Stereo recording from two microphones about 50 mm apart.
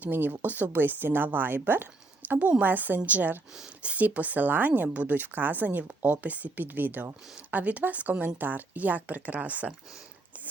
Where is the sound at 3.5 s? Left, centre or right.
Right.